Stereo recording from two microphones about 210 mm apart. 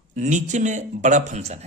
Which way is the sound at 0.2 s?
35° right (ahead or behind).